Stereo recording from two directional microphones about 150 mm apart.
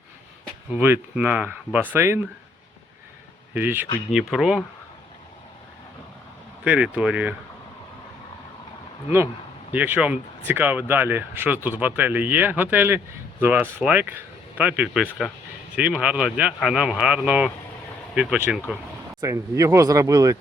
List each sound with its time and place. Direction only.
0.7 s speech: 10° right (ahead or behind)
3.5 s speech: 15° right (ahead or behind)
4.1 s speech: centre (ahead or behind)
6.7 s speech: 10° right (ahead or behind)
9.7 s speech: 10° right (ahead or behind)
19.2 s speech: 20° right (ahead or behind)